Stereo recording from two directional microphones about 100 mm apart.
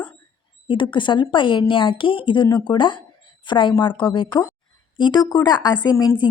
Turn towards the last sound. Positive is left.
turn(degrees=40)  # may be behind; listen again after turning